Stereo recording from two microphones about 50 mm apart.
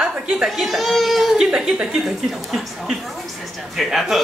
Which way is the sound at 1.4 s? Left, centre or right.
Centre.